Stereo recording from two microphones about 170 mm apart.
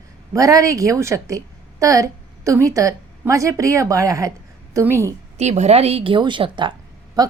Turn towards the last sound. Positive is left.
turn(degrees=-20)  # may be behind; listen again after turning